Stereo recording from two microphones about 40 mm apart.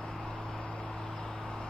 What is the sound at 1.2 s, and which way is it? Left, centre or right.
Vehicle, left.